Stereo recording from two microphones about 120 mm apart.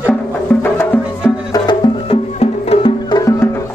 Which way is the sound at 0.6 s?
15° left (ahead or behind).